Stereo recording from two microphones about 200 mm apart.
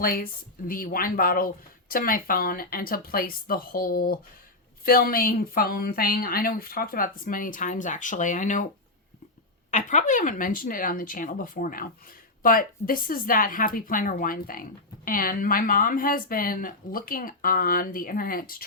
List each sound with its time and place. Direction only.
0.0 s speech: 45° left (ahead or behind)
9.7 s speech: 40° left (ahead or behind)